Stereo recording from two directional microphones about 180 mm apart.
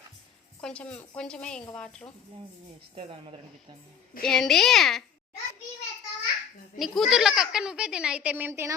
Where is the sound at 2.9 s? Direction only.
30° right (ahead or behind).